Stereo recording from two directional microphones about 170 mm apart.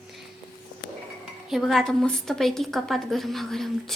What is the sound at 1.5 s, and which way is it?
A woman's voice, centre (ahead or behind).